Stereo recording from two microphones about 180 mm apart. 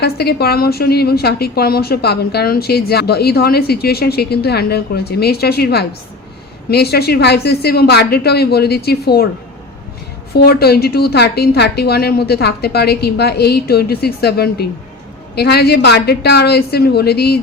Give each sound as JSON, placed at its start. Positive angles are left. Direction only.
{"t": 0.0, "sound": "a woman's voice", "side_deg": 65}
{"t": 10.3, "sound": "a woman's voice", "side_deg": 60}